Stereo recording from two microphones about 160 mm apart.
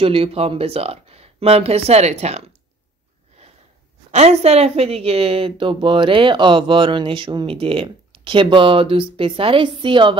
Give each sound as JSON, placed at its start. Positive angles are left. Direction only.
{"t": 0.0, "sound": "a woman's voice", "side_deg": -35}
{"t": 4.1, "sound": "a woman's voice", "side_deg": -45}